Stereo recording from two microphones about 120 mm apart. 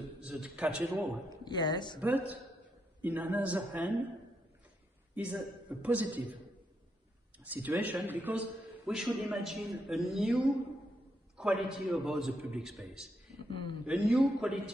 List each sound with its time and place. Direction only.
0.3 s a man's voice: 10° right (ahead or behind)
1.3 s speech: 35° left (ahead or behind)
2.0 s a man's voice: 15° right (ahead or behind)
5.1 s a man's voice: 15° right (ahead or behind)
8.9 s a man's voice: centre (ahead or behind)
11.3 s a man's voice: centre (ahead or behind)
13.5 s a man's voice: 45° left (ahead or behind)
13.8 s a man's voice: 5° right (ahead or behind)